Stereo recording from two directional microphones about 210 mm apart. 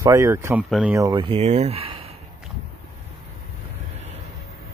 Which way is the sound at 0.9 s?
20° right (ahead or behind).